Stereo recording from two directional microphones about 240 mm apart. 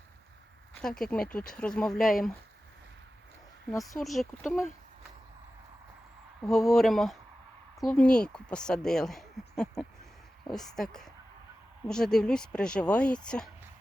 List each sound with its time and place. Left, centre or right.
0.8 s speech: centre
3.9 s speech: centre
6.4 s speech: centre